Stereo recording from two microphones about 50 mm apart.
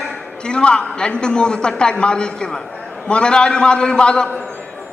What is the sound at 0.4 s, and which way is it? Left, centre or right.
A man's voice, centre.